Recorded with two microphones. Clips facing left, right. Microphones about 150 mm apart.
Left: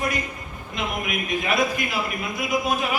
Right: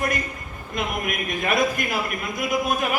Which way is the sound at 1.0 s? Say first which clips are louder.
Even; 50° right (ahead or behind).